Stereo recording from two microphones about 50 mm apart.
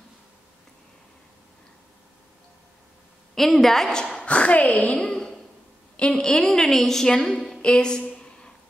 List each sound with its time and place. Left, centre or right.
3.3 s a woman's voice: centre
4.3 s speech: left
4.9 s a sound: centre
5.9 s a woman's voice: centre
7.6 s a woman's voice: centre